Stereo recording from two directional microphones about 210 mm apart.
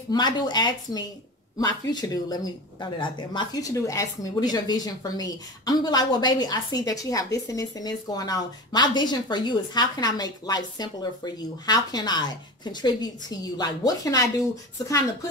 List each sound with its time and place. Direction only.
0.1 s speech: 20° left (ahead or behind)